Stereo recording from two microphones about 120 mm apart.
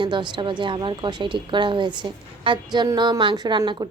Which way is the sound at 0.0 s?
40° right (ahead or behind).